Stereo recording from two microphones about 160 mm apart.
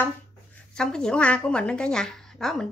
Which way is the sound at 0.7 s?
5° left (ahead or behind).